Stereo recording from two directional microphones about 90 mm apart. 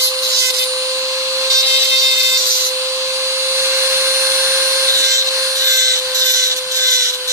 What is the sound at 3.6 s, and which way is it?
Tools, 30° right (ahead or behind).